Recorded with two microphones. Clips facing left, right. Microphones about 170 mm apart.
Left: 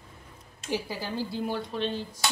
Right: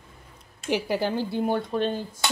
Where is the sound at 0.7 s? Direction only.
70° right (ahead or behind); by 1.9 s 50° right (ahead or behind).